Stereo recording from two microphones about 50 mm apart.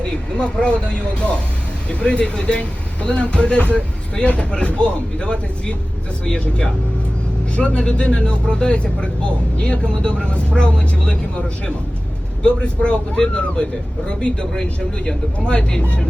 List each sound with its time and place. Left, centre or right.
0.0 s speech: centre